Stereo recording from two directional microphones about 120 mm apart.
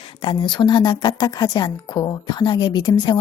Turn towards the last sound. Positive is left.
turn(degrees=35)  # may be behind; listen again after turning